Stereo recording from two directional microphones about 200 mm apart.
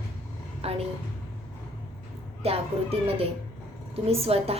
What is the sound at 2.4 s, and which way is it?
A woman's voice, 30° right (ahead or behind).